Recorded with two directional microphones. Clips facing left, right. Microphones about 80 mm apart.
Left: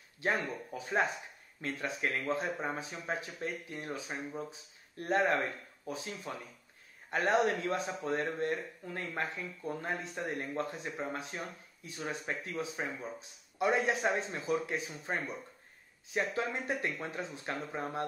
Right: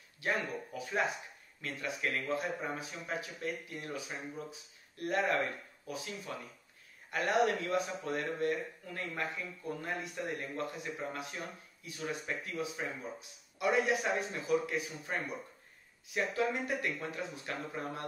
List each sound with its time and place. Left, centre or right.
0.2 s speech: left